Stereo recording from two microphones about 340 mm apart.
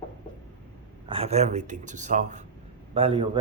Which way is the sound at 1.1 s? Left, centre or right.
Centre.